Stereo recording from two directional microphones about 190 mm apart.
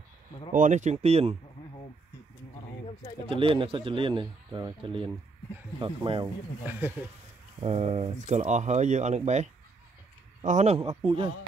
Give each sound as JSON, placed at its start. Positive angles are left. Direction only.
{"t": 0.5, "sound": "speech", "side_deg": -40}
{"t": 3.3, "sound": "a man's voice", "side_deg": -30}
{"t": 6.2, "sound": "speech", "side_deg": -10}
{"t": 7.6, "sound": "a man's voice", "side_deg": -35}